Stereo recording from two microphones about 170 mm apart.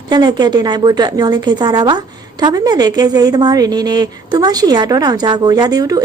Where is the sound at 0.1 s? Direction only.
25° right (ahead or behind).